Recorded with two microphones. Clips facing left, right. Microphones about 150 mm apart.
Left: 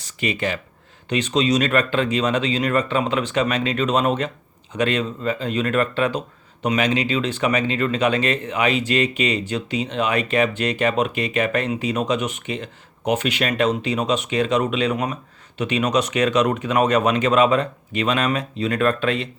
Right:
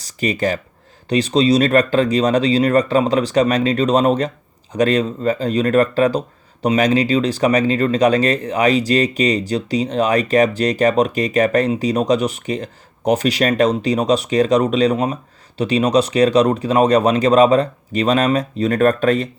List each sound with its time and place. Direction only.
0.0 s speech: 40° right (ahead or behind)